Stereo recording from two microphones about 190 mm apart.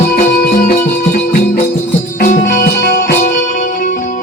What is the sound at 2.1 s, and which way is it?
Music, 45° left (ahead or behind).